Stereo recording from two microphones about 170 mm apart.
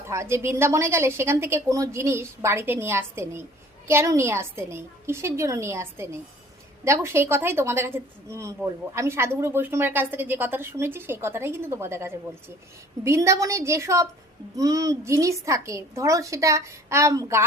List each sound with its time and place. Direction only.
0.1 s a woman's voice: 15° right (ahead or behind)